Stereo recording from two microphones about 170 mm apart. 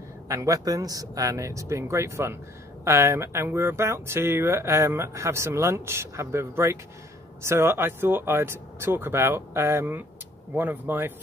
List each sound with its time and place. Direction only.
0.3 s speech: 20° right (ahead or behind)